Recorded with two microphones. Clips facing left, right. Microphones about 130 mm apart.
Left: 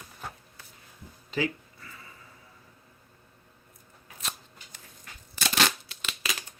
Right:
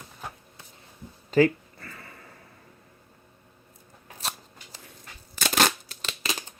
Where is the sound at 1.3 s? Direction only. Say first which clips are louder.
Right 10 dB; 50° right (ahead or behind).